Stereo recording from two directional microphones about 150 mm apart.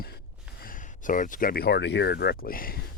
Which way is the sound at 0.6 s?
65° left (ahead or behind).